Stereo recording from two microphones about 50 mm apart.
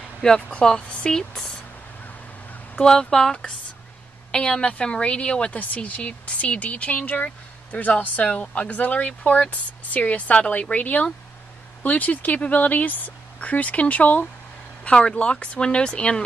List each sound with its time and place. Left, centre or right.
0.5 s speech: left
2.8 s speech: centre
5.6 s speech: left